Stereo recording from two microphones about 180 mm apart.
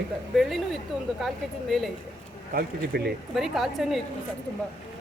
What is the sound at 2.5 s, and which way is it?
Speech, 65° right (ahead or behind).